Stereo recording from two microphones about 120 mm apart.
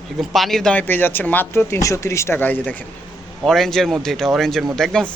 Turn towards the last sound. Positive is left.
turn(degrees=5)  # may be behind; listen again after turning